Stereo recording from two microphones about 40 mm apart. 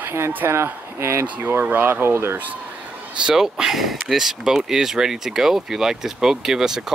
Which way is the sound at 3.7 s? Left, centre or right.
Centre.